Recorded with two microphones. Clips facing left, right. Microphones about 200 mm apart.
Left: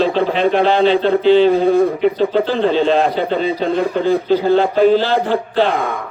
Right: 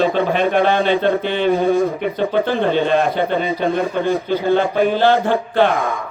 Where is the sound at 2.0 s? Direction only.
55° right (ahead or behind).